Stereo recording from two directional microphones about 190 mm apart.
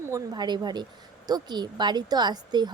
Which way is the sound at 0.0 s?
20° right (ahead or behind).